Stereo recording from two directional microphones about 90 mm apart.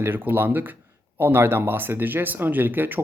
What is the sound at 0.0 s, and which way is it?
Speech, 25° right (ahead or behind).